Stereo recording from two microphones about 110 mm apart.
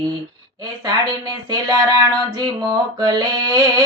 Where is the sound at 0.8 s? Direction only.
35° right (ahead or behind).